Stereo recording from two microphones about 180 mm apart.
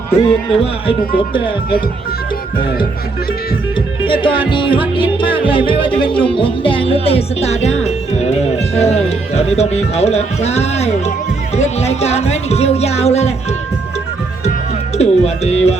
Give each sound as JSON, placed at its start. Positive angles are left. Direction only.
{"t": 0.2, "sound": "speech", "side_deg": 30}
{"t": 3.8, "sound": "music", "side_deg": 30}
{"t": 6.0, "sound": "speech", "side_deg": 30}
{"t": 14.9, "sound": "speech", "side_deg": 35}